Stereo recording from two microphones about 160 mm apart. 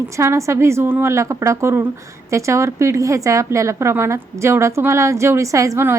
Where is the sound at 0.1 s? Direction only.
20° right (ahead or behind).